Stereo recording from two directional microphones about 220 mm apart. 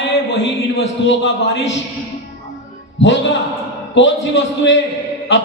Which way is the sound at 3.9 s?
55° left (ahead or behind).